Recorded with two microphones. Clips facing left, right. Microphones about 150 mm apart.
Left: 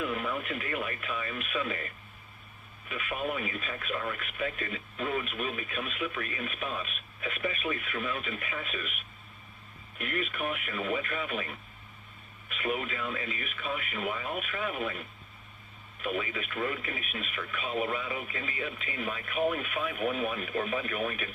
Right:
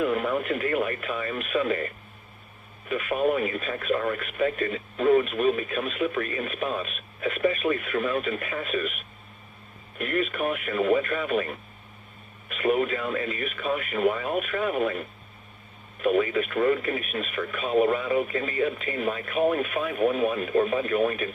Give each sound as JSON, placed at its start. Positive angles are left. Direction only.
{"t": 0.0, "sound": "speech", "side_deg": -45}
{"t": 2.9, "sound": "speech", "side_deg": -40}
{"t": 10.0, "sound": "speech", "side_deg": -40}